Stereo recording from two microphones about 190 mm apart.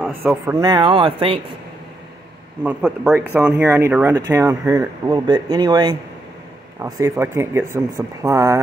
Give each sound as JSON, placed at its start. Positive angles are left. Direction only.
{"t": 0.2, "sound": "speech", "side_deg": -10}
{"t": 0.6, "sound": "speech", "side_deg": -20}
{"t": 2.6, "sound": "speech", "side_deg": -5}